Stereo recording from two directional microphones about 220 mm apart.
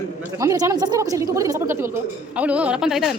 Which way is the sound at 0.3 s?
15° right (ahead or behind).